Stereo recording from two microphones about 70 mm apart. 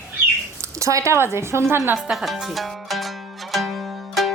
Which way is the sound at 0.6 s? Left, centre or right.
Right.